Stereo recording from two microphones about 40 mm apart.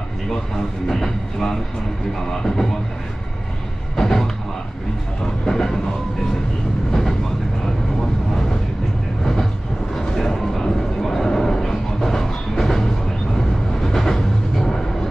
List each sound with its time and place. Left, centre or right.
0.3 s speech: centre
3.9 s a sound: centre
5.2 s speech: centre
6.9 s vehicle: centre
9.2 s train: centre
9.9 s a sound: centre